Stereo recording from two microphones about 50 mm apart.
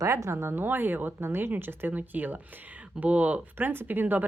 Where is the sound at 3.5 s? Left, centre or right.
Right.